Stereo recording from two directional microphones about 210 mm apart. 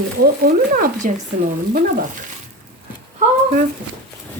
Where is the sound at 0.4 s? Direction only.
40° right (ahead or behind).